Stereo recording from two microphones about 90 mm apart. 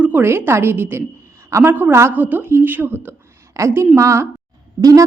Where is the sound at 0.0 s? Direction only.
25° right (ahead or behind).